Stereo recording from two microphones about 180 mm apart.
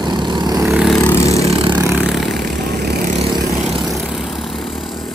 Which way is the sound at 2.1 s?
Centre (ahead or behind).